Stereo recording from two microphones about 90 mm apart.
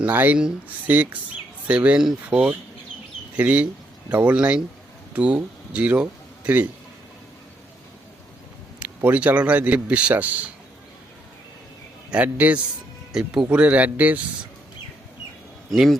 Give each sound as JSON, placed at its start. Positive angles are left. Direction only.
{"t": 0.0, "sound": "a man's voice", "side_deg": -20}
{"t": 8.8, "sound": "a man's voice", "side_deg": -20}
{"t": 12.1, "sound": "a man's voice", "side_deg": -15}
{"t": 15.7, "sound": "speech", "side_deg": 0}